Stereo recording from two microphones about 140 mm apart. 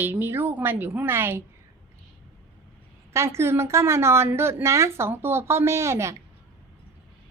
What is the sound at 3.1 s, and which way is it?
A woman's voice, 20° right (ahead or behind).